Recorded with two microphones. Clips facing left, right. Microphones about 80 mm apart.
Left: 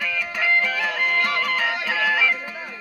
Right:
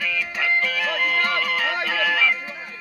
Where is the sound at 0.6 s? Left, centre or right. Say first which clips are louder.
Even; left.